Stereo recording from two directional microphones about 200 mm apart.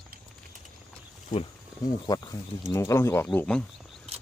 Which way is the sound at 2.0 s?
20° left (ahead or behind).